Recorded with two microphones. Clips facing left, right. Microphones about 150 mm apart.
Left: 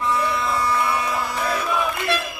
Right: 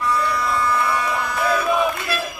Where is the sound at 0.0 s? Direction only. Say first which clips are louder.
Right 1 dB; 20° left (ahead or behind).